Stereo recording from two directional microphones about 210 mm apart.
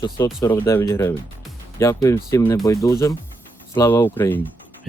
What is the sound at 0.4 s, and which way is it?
Speech, 15° left (ahead or behind).